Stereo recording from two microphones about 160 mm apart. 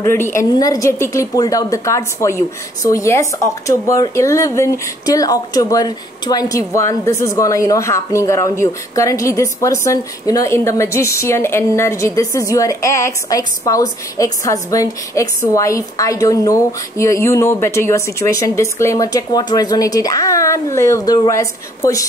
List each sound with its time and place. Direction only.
0.0 s a woman's voice: 15° left (ahead or behind)